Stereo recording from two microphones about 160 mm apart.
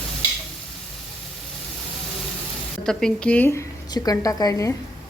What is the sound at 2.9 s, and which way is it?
A woman's voice, 5° left (ahead or behind).